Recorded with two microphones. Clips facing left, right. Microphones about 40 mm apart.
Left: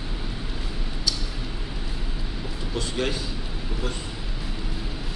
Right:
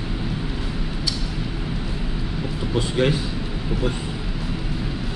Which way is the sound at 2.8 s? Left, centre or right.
Centre.